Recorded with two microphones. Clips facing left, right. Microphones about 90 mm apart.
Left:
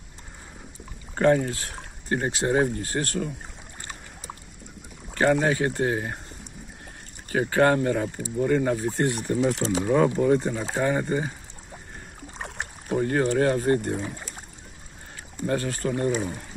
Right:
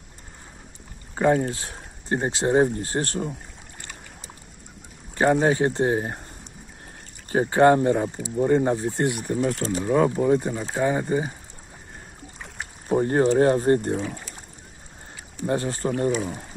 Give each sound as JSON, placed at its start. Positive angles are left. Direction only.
{"t": 1.1, "sound": "speech", "side_deg": -10}
{"t": 1.5, "sound": "speech", "side_deg": -20}
{"t": 5.1, "sound": "speech", "side_deg": -30}
{"t": 7.2, "sound": "speech", "side_deg": -30}
{"t": 9.1, "sound": "speech", "side_deg": -5}
{"t": 12.4, "sound": "boat", "side_deg": 70}
{"t": 12.9, "sound": "speech", "side_deg": -30}
{"t": 15.4, "sound": "speech", "side_deg": -25}